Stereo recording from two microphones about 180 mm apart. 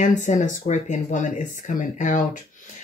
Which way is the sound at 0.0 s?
40° left (ahead or behind).